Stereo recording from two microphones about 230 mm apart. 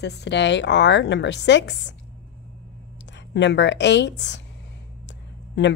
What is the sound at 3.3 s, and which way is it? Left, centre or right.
A woman's voice, left.